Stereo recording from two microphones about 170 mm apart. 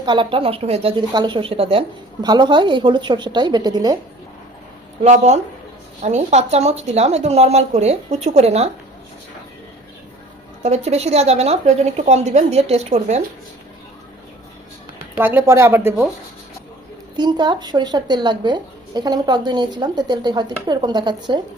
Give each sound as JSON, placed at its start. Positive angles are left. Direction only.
{"t": 0.0, "sound": "a woman's voice", "side_deg": -30}
{"t": 5.0, "sound": "speech", "side_deg": -40}
{"t": 10.6, "sound": "speech", "side_deg": -40}
{"t": 15.2, "sound": "speech", "side_deg": -15}
{"t": 17.2, "sound": "a woman's voice", "side_deg": -25}